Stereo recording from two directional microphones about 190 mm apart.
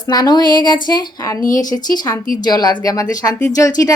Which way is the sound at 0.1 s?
20° left (ahead or behind).